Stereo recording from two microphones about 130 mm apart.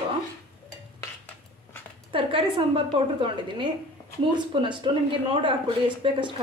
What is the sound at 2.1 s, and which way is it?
A woman's voice, 45° right (ahead or behind).